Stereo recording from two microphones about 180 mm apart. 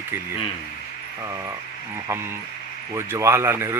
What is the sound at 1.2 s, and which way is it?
Speech, 20° right (ahead or behind).